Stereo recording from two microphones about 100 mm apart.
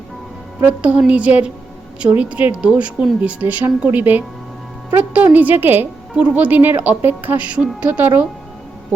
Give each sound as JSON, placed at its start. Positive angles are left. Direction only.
{"t": 0.6, "sound": "a woman's voice", "side_deg": -10}